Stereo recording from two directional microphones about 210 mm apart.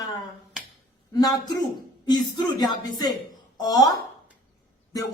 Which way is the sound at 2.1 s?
20° left (ahead or behind).